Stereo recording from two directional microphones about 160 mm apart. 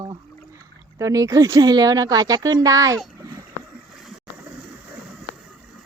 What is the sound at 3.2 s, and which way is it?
Boat, 20° right (ahead or behind).